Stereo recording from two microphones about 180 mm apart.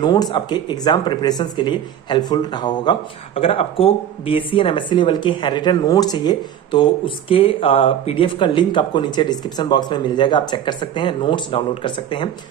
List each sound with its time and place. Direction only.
0.0 s speech: 25° left (ahead or behind)